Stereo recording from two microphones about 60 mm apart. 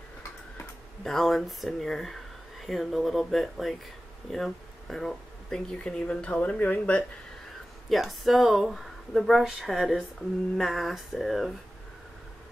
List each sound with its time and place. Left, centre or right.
1.0 s speech: centre
5.9 s speech: centre
7.9 s speech: centre